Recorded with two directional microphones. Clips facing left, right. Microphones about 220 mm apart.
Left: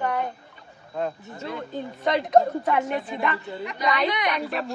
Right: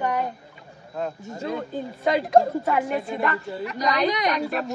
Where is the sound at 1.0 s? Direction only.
5° right (ahead or behind).